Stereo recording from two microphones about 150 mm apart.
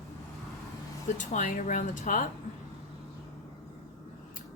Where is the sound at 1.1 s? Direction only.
60° left (ahead or behind).